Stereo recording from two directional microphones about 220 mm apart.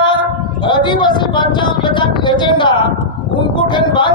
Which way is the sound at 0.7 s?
20° left (ahead or behind).